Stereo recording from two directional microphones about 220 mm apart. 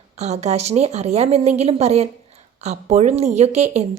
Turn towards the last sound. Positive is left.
turn(degrees=-30)  # may be behind; listen again after turning